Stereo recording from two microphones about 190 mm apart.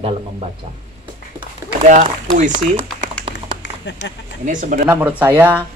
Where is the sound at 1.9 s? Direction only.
40° right (ahead or behind).